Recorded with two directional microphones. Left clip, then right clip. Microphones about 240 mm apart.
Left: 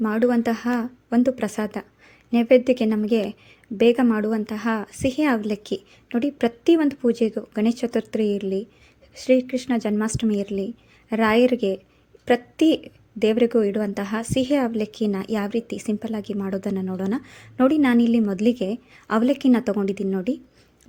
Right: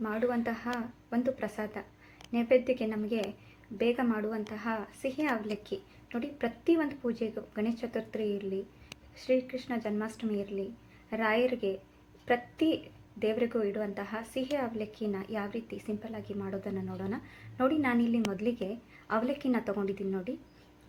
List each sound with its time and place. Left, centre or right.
0.0 s a woman's voice: left